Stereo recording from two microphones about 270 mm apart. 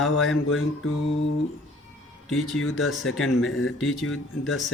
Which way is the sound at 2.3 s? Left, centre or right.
Centre.